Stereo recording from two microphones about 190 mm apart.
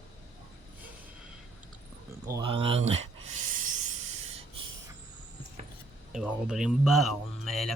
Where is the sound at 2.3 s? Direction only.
25° right (ahead or behind).